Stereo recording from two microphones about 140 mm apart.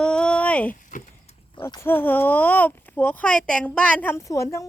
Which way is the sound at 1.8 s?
15° left (ahead or behind).